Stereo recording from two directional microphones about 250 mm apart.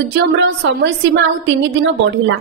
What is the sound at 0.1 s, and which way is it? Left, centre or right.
Speech, right.